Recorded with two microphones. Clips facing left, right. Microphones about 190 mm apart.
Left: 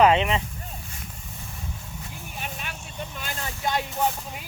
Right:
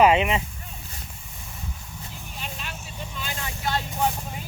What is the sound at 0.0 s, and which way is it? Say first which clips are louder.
Speech: right 1 dB; 10° right (ahead or behind).